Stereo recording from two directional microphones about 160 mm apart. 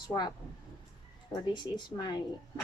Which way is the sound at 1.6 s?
25° left (ahead or behind).